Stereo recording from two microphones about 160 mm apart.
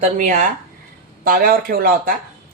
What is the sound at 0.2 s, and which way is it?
Speech, 50° right (ahead or behind).